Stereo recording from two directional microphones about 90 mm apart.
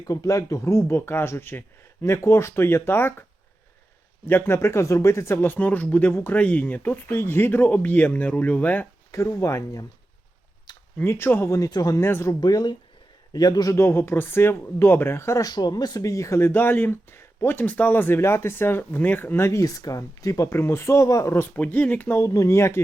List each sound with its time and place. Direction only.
0.0 s speech: 40° left (ahead or behind)
4.3 s speech: 25° left (ahead or behind)
9.1 s speech: 35° left (ahead or behind)
10.7 s a sound: 50° left (ahead or behind)
11.0 s speech: 25° left (ahead or behind)
11.7 s speech: 45° left (ahead or behind)
11.9 s speech: 25° left (ahead or behind)
12.3 s speech: 45° left (ahead or behind)
15.4 s speech: 50° left (ahead or behind)
16.5 s speech: 20° left (ahead or behind); by 21.3 s 35° left (ahead or behind)
21.3 s speech: 20° left (ahead or behind)
22.3 s speech: 35° left (ahead or behind)